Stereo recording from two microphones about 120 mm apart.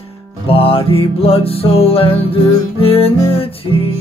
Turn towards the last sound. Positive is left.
turn(degrees=50)  # may be behind; listen again after turning